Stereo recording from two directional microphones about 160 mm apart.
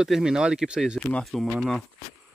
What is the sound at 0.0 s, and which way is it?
Speech, 5° right (ahead or behind).